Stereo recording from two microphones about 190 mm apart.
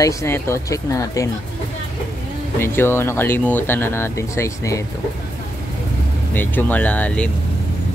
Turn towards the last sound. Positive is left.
turn(degrees=5)  # may be behind; listen again after turning